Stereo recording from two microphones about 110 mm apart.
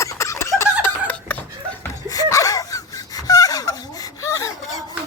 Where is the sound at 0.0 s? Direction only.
25° left (ahead or behind).